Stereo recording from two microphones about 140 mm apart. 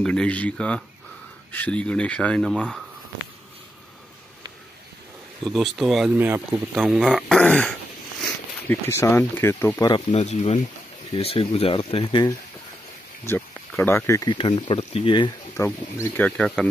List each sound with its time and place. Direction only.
0.0 s speech: 5° left (ahead or behind)
5.4 s speech: centre (ahead or behind)
6.1 s speech: 15° right (ahead or behind)
6.7 s speech: 5° right (ahead or behind)
8.6 s speech: 20° left (ahead or behind)
9.8 s speech: 30° left (ahead or behind)
10.1 s speech: 50° left (ahead or behind)
13.2 s speech: 15° left (ahead or behind)
14.3 s speech: 35° left (ahead or behind)
15.5 s speech: 20° left (ahead or behind)
16.3 s speech: 5° left (ahead or behind)